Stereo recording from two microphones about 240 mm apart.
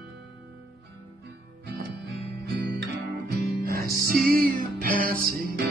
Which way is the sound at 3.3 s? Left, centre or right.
Right.